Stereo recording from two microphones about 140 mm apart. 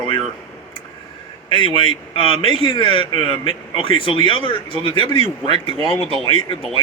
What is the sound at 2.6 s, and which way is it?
Speech, 35° left (ahead or behind).